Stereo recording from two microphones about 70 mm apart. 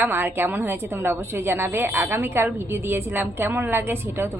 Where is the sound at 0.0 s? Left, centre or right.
Right.